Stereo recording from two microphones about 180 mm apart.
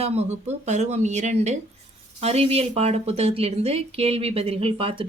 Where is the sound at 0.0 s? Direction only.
35° right (ahead or behind).